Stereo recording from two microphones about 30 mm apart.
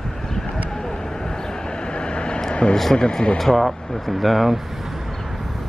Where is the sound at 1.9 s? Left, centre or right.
Left.